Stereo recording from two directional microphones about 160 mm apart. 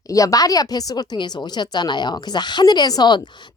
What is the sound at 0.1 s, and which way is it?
A woman's voice, 20° left (ahead or behind).